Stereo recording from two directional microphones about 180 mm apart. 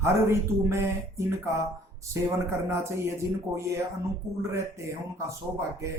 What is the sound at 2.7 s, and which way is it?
Speech, 15° right (ahead or behind).